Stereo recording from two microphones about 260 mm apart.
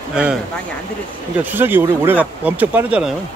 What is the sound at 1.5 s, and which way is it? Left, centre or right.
Speech, centre.